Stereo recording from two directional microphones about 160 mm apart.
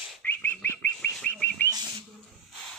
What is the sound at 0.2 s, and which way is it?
Bird, 10° left (ahead or behind).